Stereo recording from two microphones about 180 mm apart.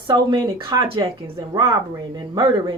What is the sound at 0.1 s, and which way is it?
Speech, 20° right (ahead or behind).